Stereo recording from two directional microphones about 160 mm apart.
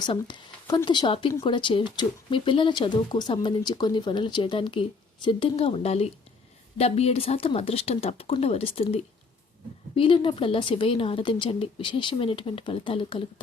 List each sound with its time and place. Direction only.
0.0 s speech: 30° left (ahead or behind)